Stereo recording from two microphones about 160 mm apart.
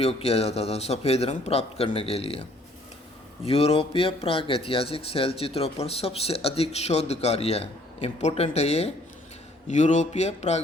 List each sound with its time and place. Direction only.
0.0 s speech: 40° left (ahead or behind)
3.4 s speech: 35° left (ahead or behind)